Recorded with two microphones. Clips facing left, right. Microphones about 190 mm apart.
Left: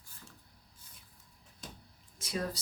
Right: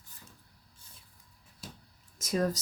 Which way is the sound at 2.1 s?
45° right (ahead or behind).